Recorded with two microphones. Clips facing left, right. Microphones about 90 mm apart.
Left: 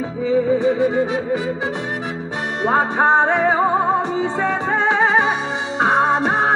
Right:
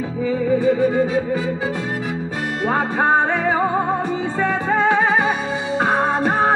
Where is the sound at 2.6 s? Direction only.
20° left (ahead or behind).